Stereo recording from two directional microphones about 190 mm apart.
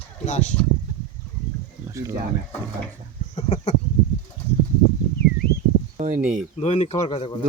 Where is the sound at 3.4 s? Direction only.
35° left (ahead or behind).